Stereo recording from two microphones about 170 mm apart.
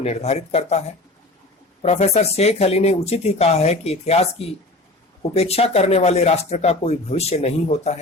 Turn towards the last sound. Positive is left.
turn(degrees=40)  # may be behind; listen again after turning